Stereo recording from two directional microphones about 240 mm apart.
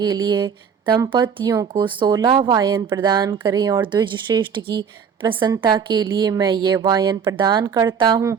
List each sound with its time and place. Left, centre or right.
0.0 s speech: centre